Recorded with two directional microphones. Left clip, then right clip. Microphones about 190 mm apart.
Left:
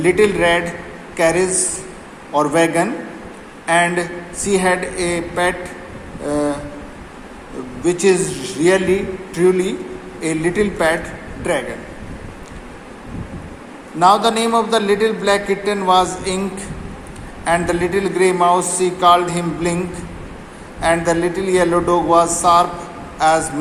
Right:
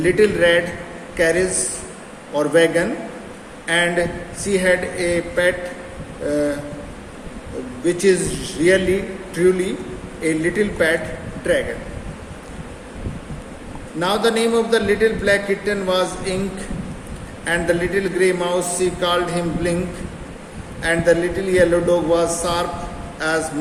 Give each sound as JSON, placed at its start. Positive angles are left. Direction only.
{"t": 0.0, "sound": "a man's voice", "side_deg": 20}
{"t": 7.9, "sound": "a man's voice", "side_deg": 20}
{"t": 14.0, "sound": "a man's voice", "side_deg": 20}
{"t": 20.8, "sound": "a man's voice", "side_deg": 20}